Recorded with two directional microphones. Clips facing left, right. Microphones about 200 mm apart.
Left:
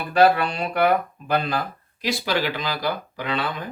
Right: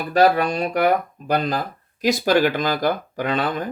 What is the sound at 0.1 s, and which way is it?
Speech, 40° right (ahead or behind).